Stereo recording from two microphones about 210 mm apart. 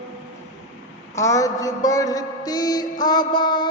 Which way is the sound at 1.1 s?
15° left (ahead or behind).